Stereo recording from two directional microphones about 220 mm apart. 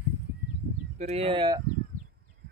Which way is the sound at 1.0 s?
25° right (ahead or behind).